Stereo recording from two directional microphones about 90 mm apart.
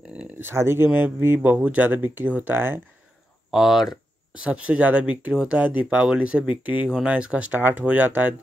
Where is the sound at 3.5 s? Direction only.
5° right (ahead or behind); by 8.3 s 20° right (ahead or behind).